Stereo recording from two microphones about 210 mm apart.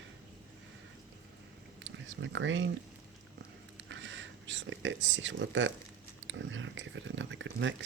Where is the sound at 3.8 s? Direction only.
60° right (ahead or behind).